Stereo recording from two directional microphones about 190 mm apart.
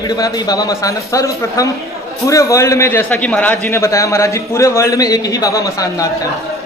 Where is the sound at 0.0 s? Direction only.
20° left (ahead or behind).